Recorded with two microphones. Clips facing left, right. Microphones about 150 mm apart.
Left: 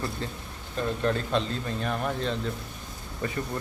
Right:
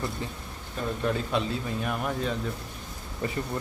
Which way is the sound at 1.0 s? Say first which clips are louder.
Even; 10° right (ahead or behind).